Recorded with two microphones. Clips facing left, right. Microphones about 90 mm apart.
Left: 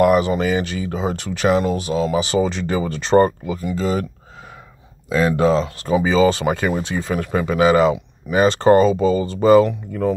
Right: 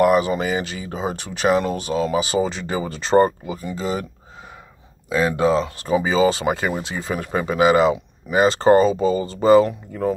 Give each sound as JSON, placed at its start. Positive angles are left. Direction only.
{"t": 0.0, "sound": "speech", "side_deg": -30}
{"t": 1.7, "sound": "speech", "side_deg": -35}
{"t": 5.1, "sound": "speech", "side_deg": -20}